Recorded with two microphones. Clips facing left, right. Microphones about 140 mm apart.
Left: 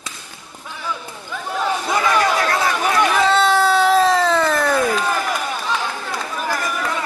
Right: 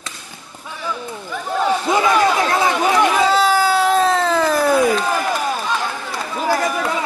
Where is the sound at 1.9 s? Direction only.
20° right (ahead or behind).